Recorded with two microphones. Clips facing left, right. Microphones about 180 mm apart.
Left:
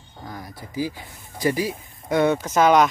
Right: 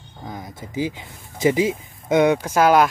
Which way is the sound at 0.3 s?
20° right (ahead or behind).